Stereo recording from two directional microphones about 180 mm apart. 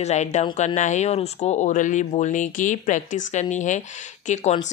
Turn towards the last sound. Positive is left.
turn(degrees=40)  # may be behind; listen again after turning